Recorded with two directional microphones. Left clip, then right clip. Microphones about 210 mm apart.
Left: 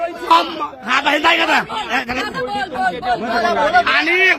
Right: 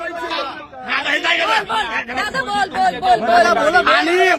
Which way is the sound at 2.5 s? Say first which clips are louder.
Right 4 dB; 45° right (ahead or behind).